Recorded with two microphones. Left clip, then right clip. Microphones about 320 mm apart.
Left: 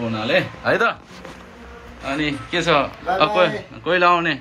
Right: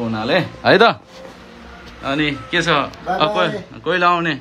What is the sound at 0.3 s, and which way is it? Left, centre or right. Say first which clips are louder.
Speech: right 5 dB; right.